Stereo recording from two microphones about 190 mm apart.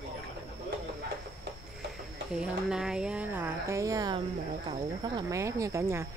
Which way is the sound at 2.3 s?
5° right (ahead or behind).